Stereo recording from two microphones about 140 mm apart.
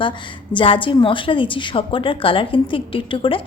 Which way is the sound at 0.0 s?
35° left (ahead or behind).